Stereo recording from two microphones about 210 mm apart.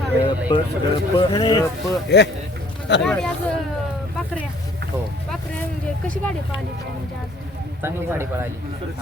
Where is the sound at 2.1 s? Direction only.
55° left (ahead or behind).